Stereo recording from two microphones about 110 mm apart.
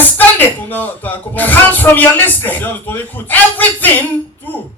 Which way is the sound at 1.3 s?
15° left (ahead or behind).